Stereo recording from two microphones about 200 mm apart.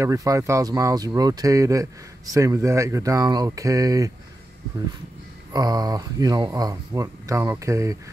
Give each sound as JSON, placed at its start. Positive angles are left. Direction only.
{"t": 0.0, "sound": "speech", "side_deg": -15}
{"t": 5.5, "sound": "speech", "side_deg": -20}